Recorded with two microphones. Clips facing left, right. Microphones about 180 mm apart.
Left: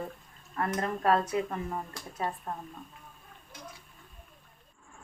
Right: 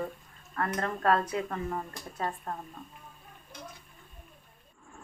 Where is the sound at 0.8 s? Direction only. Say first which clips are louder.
Even; 15° left (ahead or behind).